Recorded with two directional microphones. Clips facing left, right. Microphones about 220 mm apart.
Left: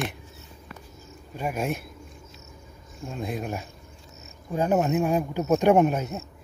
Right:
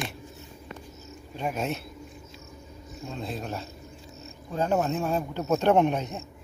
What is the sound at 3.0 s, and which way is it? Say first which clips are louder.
A man's voice: left 3 dB; 10° left (ahead or behind).